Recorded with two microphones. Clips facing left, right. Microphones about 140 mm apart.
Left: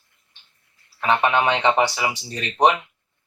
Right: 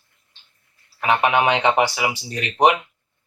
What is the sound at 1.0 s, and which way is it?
Speech, 10° right (ahead or behind).